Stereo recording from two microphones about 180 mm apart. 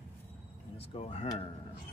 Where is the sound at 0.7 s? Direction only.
35° left (ahead or behind).